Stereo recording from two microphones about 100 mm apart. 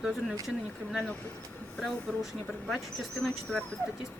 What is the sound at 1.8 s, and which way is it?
Speech, centre (ahead or behind).